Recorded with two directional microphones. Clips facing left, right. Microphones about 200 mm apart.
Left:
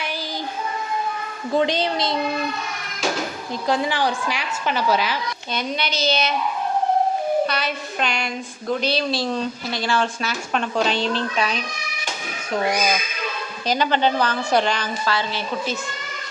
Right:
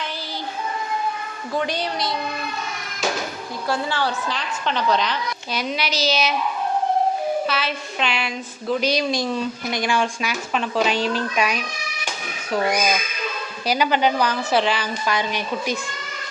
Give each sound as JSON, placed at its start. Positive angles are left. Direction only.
{"t": 1.5, "sound": "a woman's voice", "side_deg": 25}
{"t": 3.7, "sound": "a woman's voice", "side_deg": 15}
{"t": 5.5, "sound": "speech", "side_deg": -5}
{"t": 7.4, "sound": "a woman's voice", "side_deg": 0}
{"t": 8.8, "sound": "speech", "side_deg": -15}
{"t": 13.7, "sound": "speech", "side_deg": -10}
{"t": 15.0, "sound": "speech", "side_deg": -15}